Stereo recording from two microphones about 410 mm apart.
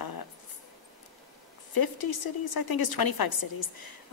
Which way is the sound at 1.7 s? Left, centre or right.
Left.